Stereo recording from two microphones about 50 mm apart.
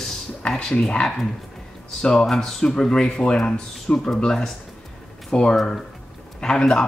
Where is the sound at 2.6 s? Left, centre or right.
Centre.